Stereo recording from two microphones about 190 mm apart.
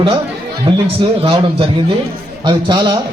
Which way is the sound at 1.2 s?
30° right (ahead or behind).